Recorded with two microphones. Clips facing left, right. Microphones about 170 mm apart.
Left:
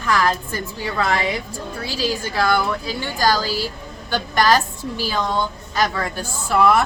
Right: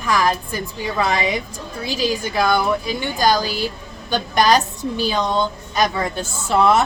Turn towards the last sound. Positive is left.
turn(degrees=-25)  # may be behind; listen again after turning